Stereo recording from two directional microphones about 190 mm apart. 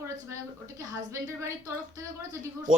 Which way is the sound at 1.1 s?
15° right (ahead or behind).